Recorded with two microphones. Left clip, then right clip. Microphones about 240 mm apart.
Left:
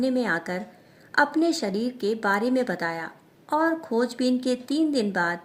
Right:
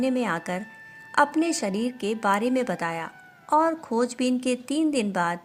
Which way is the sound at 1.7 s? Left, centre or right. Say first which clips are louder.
Left 1 dB; right.